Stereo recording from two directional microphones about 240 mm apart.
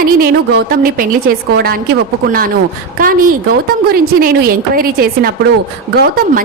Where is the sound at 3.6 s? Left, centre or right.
Right.